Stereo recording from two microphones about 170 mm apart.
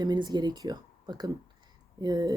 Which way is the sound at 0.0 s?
25° right (ahead or behind).